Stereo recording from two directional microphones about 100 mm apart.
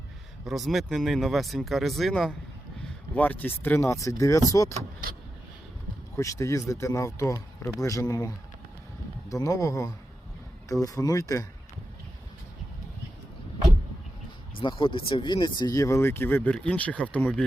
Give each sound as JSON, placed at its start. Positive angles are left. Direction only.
{"t": 0.4, "sound": "speech", "side_deg": 0}
{"t": 3.2, "sound": "speech", "side_deg": 20}
{"t": 6.1, "sound": "speech", "side_deg": 30}
{"t": 9.3, "sound": "speech", "side_deg": 35}
{"t": 14.6, "sound": "speech", "side_deg": 55}